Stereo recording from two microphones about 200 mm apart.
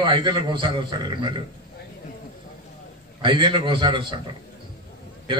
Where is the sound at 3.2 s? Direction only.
25° right (ahead or behind).